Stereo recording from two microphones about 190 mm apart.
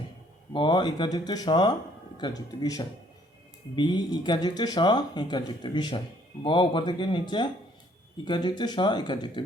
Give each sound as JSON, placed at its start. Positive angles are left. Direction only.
{"t": 0.5, "sound": "speech", "side_deg": 25}